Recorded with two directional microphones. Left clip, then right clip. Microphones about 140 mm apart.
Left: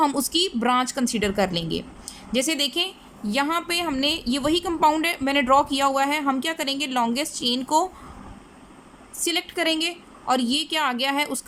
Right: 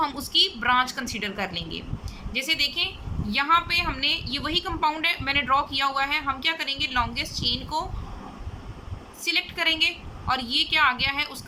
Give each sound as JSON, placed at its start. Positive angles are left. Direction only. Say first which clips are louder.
{"t": 0.0, "sound": "a woman's voice", "louder": "left 1 dB", "side_deg": 45}
{"t": 9.2, "sound": "a woman's voice", "louder": "even", "side_deg": 45}